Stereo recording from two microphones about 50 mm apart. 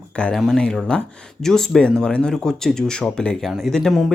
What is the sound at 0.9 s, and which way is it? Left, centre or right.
Speech, left.